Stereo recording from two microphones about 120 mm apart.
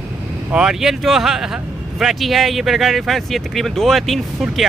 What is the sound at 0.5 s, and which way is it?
Speech, 5° right (ahead or behind).